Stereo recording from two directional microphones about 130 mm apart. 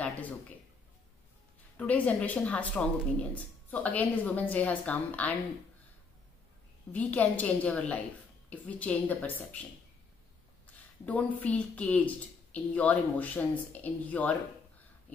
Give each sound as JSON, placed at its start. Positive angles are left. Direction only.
{"t": 0.0, "sound": "speech", "side_deg": 10}
{"t": 1.8, "sound": "speech", "side_deg": 10}
{"t": 6.9, "sound": "speech", "side_deg": 10}
{"t": 10.7, "sound": "speech", "side_deg": 10}